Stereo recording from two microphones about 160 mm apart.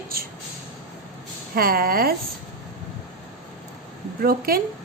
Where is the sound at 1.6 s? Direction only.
65° right (ahead or behind).